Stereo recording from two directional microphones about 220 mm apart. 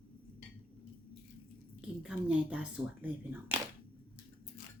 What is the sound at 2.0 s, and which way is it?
Speech, 5° right (ahead or behind).